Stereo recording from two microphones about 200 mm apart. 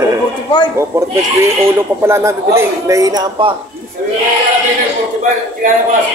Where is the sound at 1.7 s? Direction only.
15° right (ahead or behind).